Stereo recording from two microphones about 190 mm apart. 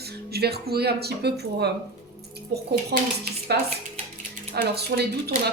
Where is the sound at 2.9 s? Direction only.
60° right (ahead or behind).